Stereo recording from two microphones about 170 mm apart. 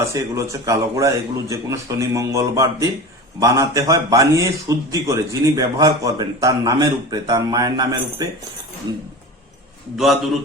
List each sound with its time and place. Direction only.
0.0 s a man's voice: 15° right (ahead or behind)
10.0 s a man's voice: centre (ahead or behind)